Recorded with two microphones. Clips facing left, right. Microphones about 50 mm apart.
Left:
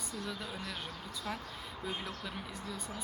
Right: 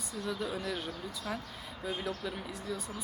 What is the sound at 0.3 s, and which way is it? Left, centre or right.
Speech, centre.